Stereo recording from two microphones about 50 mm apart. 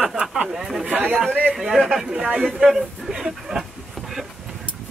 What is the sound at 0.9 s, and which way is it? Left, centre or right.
Speech, right.